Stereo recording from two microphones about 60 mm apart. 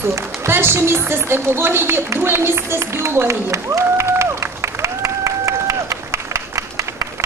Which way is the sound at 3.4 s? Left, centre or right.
Right.